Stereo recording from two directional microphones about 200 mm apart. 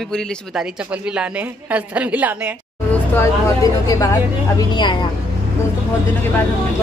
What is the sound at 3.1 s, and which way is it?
Speech, 15° left (ahead or behind).